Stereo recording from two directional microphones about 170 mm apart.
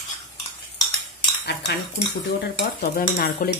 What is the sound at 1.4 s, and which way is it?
Cutlery, 75° left (ahead or behind).